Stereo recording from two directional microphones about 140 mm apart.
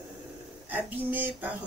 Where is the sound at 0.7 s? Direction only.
10° right (ahead or behind).